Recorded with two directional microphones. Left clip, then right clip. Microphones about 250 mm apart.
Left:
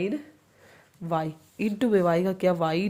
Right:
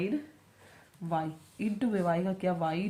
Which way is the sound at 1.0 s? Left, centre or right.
Left.